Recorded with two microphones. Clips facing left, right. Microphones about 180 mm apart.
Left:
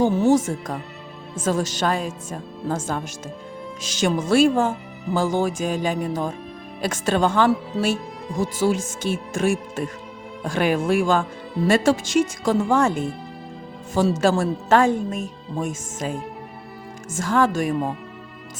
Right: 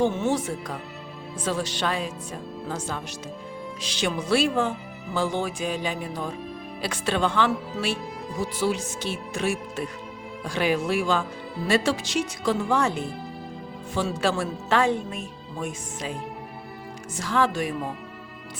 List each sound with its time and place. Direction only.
0.0 s speech: 40° left (ahead or behind)
17.2 s speech: 45° left (ahead or behind)